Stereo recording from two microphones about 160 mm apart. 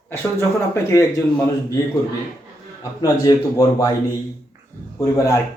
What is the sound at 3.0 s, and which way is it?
Speech, 25° left (ahead or behind).